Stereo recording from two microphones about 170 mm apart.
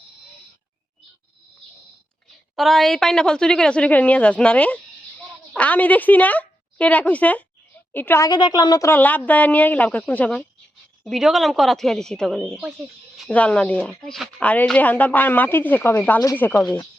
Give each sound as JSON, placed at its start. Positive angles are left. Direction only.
{"t": 2.6, "sound": "a woman's voice", "side_deg": 0}
{"t": 8.3, "sound": "a woman's voice", "side_deg": 25}
{"t": 8.9, "sound": "a woman's voice", "side_deg": 10}